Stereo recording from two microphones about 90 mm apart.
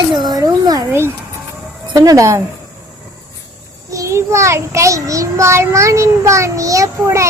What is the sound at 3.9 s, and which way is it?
Child singing, 35° right (ahead or behind).